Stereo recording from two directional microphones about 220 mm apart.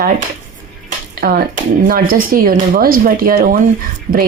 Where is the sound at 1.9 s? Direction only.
40° right (ahead or behind).